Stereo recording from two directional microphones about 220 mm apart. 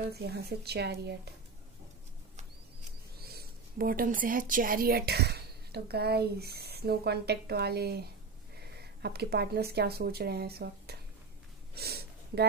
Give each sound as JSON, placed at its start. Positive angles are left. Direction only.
{"t": 0.1, "sound": "speech", "side_deg": -45}
{"t": 3.3, "sound": "speech", "side_deg": -45}
{"t": 11.7, "sound": "a sound", "side_deg": -45}